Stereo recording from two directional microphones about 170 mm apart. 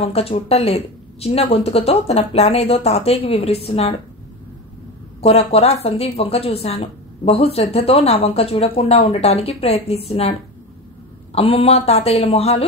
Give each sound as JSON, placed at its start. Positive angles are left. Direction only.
{"t": 0.0, "sound": "a woman's voice", "side_deg": 35}
{"t": 5.2, "sound": "a woman's voice", "side_deg": 40}
{"t": 11.3, "sound": "a woman's voice", "side_deg": 35}